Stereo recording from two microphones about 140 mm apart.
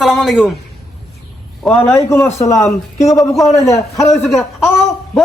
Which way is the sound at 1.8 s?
15° left (ahead or behind).